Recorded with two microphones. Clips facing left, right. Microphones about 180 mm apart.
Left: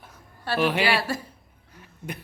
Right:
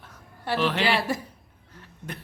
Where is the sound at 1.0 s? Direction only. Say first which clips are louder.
Right 1 dB; 20° right (ahead or behind).